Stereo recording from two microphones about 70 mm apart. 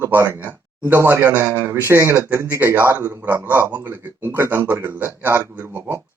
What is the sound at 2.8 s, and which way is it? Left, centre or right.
Speech, right.